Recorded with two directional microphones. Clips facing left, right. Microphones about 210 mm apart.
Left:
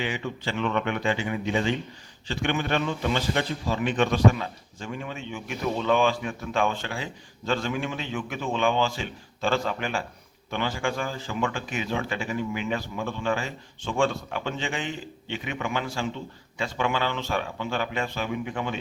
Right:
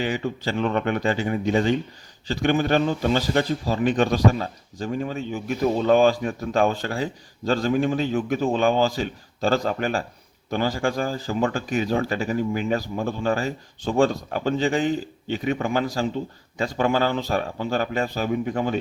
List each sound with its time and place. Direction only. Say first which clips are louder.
0.0 s speech: right 5 dB; 40° right (ahead or behind)